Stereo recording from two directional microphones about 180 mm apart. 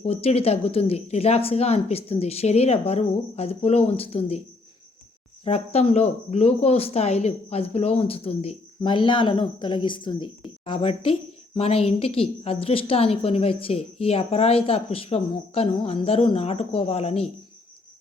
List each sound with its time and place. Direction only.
0.0 s speech: 35° left (ahead or behind)
5.5 s speech: 35° left (ahead or behind)